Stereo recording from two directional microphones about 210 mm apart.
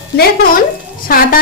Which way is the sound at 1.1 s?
45° left (ahead or behind).